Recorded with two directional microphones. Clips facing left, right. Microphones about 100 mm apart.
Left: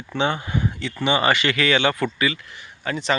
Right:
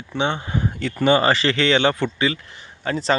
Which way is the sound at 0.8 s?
40° right (ahead or behind).